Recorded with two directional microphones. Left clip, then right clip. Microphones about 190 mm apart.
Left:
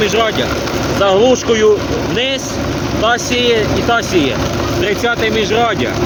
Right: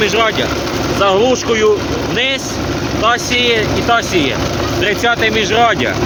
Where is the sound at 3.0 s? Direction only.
20° left (ahead or behind).